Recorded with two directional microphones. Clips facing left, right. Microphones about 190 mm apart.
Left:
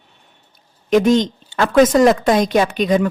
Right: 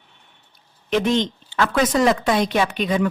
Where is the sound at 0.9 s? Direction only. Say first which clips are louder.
Left 6 dB; 45° left (ahead or behind).